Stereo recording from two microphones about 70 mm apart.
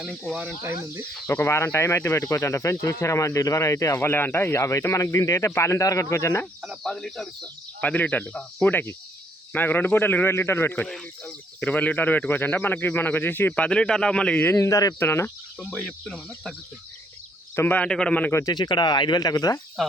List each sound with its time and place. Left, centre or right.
1.3 s speech: left
4.1 s speech: left
6.8 s speech: centre
7.4 s speech: left
10.8 s speech: centre; by 13.7 s left
13.7 s speech: centre
14.4 s speech: left
14.7 s speech: left
14.9 s speech: left
15.6 s speech: centre
17.5 s speech: left
17.7 s speech: centre
18.4 s speech: left